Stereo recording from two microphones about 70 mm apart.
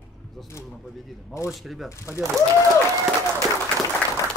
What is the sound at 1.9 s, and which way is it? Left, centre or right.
Speech, left.